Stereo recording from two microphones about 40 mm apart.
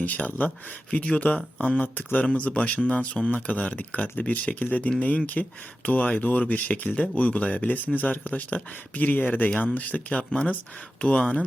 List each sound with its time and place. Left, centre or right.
0.0 s speech: left
10.1 s speech: left